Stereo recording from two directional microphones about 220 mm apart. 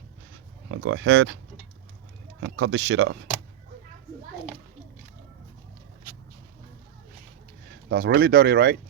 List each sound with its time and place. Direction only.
0.7 s speech: 60° right (ahead or behind)
2.4 s speech: 55° right (ahead or behind)
7.9 s speech: 45° right (ahead or behind)